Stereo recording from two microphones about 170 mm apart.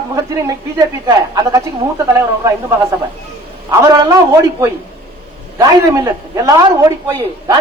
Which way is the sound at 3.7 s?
20° right (ahead or behind).